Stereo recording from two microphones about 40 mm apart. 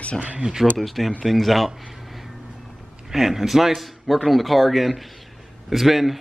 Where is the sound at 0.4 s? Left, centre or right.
Centre.